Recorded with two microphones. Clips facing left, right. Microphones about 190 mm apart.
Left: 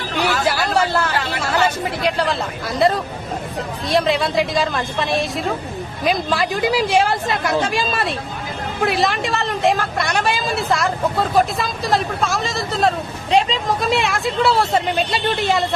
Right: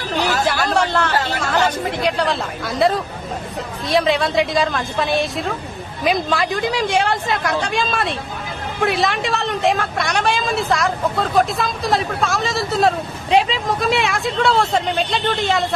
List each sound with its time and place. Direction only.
0.5 s a woman's voice: 5° left (ahead or behind)
1.1 s a sound: 40° right (ahead or behind)
1.9 s a woman's voice: centre (ahead or behind)